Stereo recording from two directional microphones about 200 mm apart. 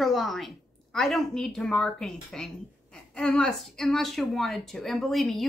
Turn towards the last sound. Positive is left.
turn(degrees=0)  # may be behind; listen again after turning